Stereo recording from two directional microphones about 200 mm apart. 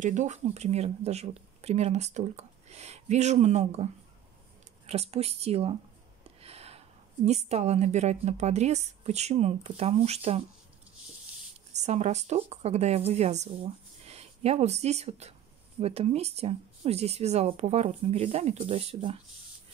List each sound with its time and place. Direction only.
0.0 s speech: 35° right (ahead or behind)
6.4 s a sound: 30° right (ahead or behind)
7.2 s speech: 35° right (ahead or behind)
11.7 s a woman's voice: 35° right (ahead or behind)